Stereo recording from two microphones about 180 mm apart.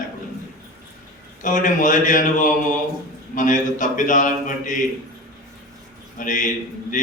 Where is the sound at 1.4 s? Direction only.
45° left (ahead or behind).